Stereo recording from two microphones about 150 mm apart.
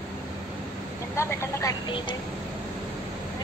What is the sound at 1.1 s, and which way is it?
Speech, 20° left (ahead or behind).